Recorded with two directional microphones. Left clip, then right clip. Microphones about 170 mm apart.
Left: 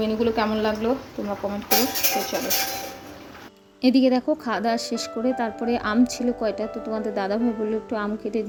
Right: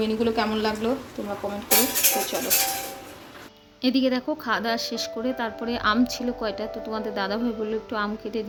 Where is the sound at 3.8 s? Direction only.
25° left (ahead or behind).